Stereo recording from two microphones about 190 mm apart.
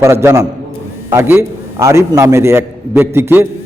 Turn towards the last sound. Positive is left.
turn(degrees=-10)  # may be behind; listen again after turning